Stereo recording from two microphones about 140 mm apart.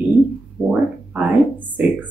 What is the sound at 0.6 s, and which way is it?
A woman's voice, 15° right (ahead or behind).